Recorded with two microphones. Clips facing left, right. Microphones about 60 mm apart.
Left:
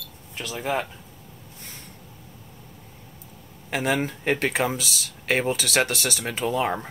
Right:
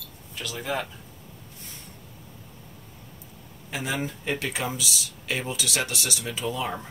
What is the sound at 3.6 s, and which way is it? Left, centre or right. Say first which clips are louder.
Speech: left 6 dB; left.